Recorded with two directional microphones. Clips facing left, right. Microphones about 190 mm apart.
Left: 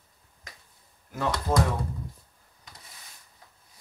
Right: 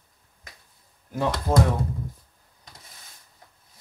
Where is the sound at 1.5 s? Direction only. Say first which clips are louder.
Right 3 dB; 25° right (ahead or behind).